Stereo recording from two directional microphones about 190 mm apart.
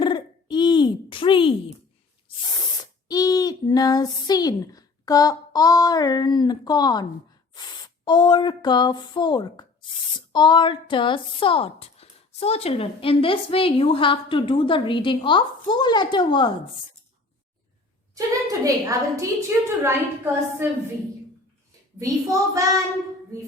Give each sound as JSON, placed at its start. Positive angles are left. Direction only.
{"t": 0.0, "sound": "a sound", "side_deg": 25}
{"t": 3.1, "sound": "a woman's voice", "side_deg": 20}
{"t": 18.1, "sound": "a woman's voice", "side_deg": -15}
{"t": 21.9, "sound": "a woman's voice", "side_deg": -15}